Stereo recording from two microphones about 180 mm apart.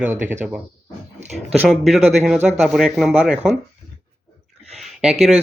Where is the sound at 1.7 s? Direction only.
Centre (ahead or behind).